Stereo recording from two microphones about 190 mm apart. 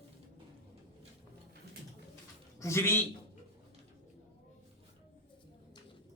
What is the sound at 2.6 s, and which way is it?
Speech, 15° left (ahead or behind).